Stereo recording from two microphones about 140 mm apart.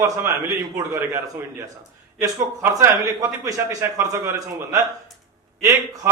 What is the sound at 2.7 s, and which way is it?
A man's voice, 25° right (ahead or behind).